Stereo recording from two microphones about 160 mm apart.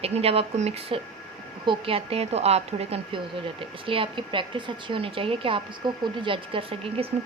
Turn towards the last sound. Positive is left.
turn(degrees=-35)  # may be behind; listen again after turning